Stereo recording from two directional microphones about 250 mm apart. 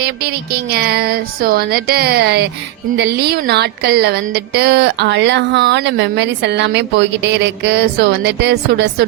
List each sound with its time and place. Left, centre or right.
0.0 s speech: right